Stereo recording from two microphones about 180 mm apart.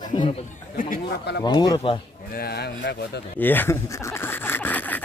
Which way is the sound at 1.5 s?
25° left (ahead or behind).